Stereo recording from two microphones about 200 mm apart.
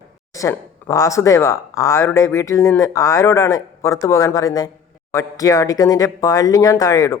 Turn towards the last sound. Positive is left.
turn(degrees=15)  # may be behind; listen again after turning